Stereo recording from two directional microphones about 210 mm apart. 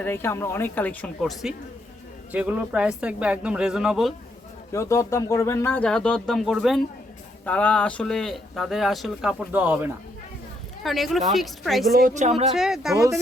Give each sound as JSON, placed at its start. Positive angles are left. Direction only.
{"t": 0.0, "sound": "speech", "side_deg": 10}
{"t": 4.7, "sound": "speech", "side_deg": 15}
{"t": 11.9, "sound": "a woman's voice", "side_deg": -40}
{"t": 12.5, "sound": "speech", "side_deg": 0}